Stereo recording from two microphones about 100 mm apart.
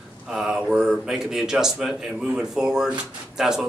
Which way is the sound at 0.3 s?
5° right (ahead or behind).